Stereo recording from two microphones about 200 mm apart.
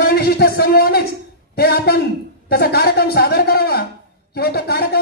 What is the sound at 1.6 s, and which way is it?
Speech, 50° left (ahead or behind).